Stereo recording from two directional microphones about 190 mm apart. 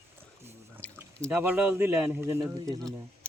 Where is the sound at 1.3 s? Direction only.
10° right (ahead or behind).